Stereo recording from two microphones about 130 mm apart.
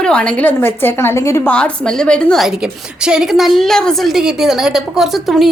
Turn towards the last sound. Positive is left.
turn(degrees=0)  # may be behind; listen again after turning